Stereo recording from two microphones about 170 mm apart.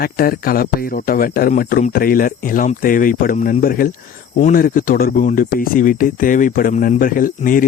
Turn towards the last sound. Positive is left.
turn(degrees=55)  # may be behind; listen again after turning